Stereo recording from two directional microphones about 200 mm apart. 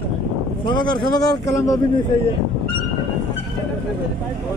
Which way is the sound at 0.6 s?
20° left (ahead or behind).